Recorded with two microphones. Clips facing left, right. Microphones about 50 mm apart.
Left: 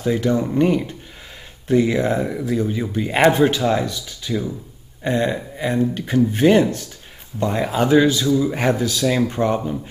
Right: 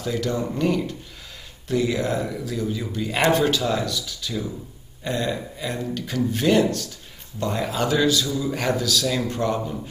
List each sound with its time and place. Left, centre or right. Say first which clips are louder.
0.0 s speech: left 6 dB; left